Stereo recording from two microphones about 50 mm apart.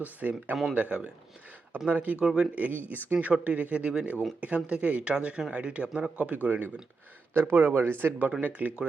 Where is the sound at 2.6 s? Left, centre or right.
Right.